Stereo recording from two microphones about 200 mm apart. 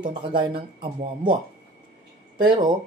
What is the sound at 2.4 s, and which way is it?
Speech, 20° right (ahead or behind).